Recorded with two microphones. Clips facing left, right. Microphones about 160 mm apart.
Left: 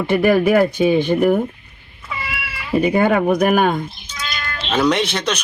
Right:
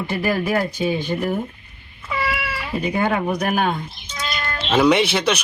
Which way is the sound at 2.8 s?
55° left (ahead or behind).